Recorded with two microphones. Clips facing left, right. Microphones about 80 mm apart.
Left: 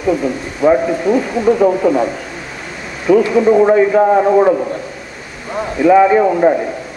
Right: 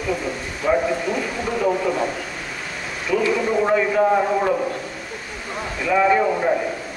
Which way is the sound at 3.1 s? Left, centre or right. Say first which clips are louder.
Left 11 dB; left.